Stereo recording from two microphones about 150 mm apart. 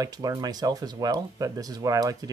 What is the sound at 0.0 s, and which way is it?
Speech, 25° right (ahead or behind).